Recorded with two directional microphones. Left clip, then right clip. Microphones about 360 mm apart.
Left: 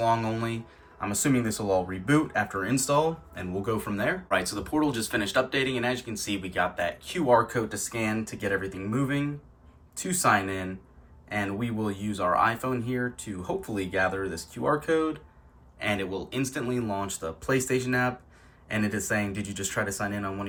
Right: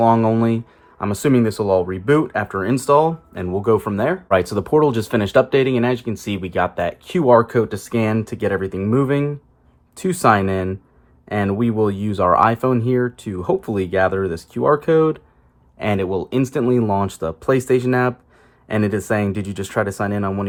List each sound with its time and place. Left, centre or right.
0.0 s speech: centre